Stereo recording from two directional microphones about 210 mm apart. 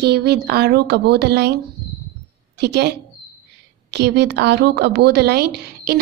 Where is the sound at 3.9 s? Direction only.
55° right (ahead or behind).